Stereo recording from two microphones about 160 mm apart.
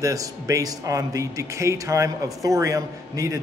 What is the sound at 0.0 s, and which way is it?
A man's voice, 20° right (ahead or behind).